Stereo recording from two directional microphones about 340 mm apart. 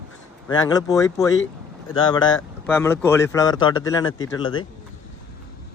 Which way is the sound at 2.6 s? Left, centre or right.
Centre.